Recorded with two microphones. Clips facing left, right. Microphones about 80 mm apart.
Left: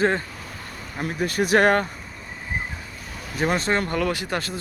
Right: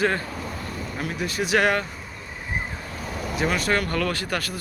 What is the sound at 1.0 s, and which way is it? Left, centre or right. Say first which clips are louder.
Speech: left 5 dB; left.